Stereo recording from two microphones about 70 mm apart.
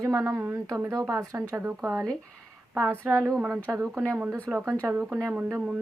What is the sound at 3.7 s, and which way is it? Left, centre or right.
Speech, right.